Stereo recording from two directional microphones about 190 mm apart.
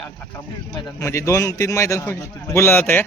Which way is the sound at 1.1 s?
15° left (ahead or behind).